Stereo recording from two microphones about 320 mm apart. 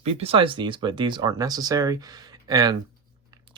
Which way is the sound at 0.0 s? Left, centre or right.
Centre.